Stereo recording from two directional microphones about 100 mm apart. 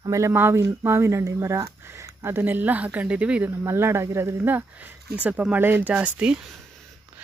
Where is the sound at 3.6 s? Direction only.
25° right (ahead or behind).